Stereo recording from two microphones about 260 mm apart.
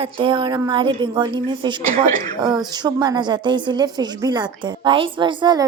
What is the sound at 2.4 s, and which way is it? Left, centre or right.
A woman's voice, centre.